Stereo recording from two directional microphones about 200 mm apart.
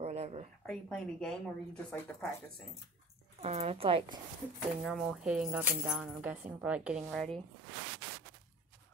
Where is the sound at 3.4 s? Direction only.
30° right (ahead or behind).